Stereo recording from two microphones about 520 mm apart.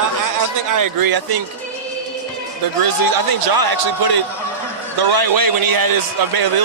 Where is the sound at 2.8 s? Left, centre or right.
Right.